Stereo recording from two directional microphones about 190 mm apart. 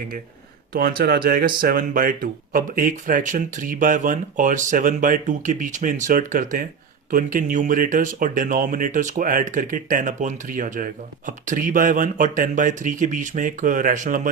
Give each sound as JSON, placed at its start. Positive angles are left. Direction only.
{"t": 0.7, "sound": "speech", "side_deg": -50}